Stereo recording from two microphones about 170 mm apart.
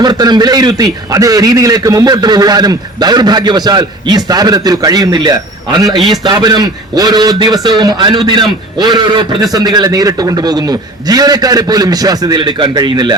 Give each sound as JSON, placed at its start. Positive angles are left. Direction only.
{"t": 0.0, "sound": "a man's voice", "side_deg": -25}